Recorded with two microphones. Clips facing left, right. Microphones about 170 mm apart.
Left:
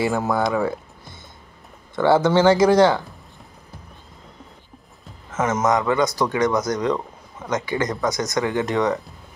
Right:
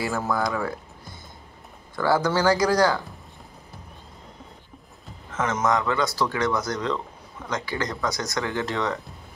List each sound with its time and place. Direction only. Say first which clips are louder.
0.0 s speech: left 5 dB; 25° left (ahead or behind)
2.0 s speech: left 6 dB; 25° left (ahead or behind)
5.3 s speech: left 4 dB; 20° left (ahead or behind)